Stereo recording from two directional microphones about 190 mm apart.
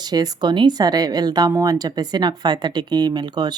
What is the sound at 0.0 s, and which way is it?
A woman's voice, 20° right (ahead or behind).